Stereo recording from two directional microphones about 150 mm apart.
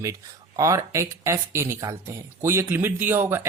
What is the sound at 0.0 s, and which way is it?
Speech, 20° right (ahead or behind).